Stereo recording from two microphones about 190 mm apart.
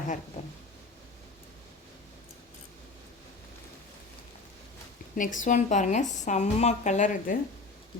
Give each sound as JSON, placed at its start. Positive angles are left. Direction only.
{"t": 5.1, "sound": "speech", "side_deg": 45}